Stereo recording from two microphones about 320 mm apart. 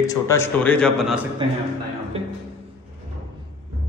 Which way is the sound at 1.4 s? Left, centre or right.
Centre.